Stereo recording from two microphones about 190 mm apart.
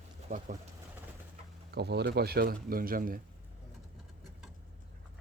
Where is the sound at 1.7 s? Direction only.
60° right (ahead or behind).